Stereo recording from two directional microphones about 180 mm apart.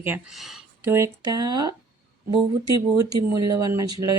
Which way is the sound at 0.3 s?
Centre (ahead or behind).